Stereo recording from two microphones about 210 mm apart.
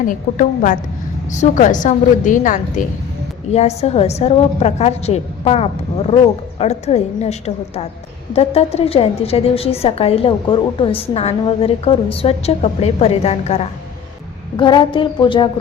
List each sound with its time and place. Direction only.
0.0 s a woman's voice: 40° left (ahead or behind); by 15.4 s 25° left (ahead or behind)